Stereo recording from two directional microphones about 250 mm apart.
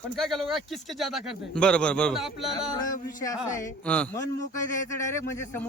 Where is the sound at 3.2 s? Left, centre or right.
Centre.